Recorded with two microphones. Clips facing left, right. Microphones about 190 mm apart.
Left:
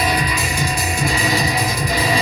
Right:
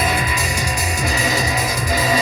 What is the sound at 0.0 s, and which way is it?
Music, 50° right (ahead or behind).